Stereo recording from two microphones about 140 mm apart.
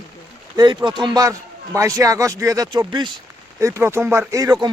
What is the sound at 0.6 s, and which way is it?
Speech, 35° right (ahead or behind).